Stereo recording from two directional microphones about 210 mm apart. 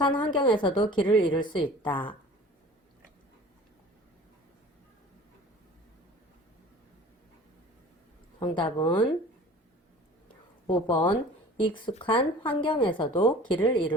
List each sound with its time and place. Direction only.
0.0 s a woman's voice: 20° left (ahead or behind)
8.5 s a woman's voice: 20° left (ahead or behind)
10.7 s a woman's voice: 25° left (ahead or behind)